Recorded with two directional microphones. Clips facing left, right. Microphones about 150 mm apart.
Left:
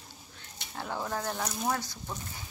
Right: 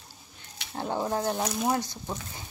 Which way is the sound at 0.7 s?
30° right (ahead or behind).